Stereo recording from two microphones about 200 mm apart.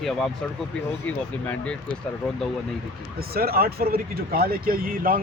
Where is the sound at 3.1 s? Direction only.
50° right (ahead or behind).